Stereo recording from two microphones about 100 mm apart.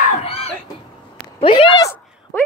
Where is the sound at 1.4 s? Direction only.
65° left (ahead or behind).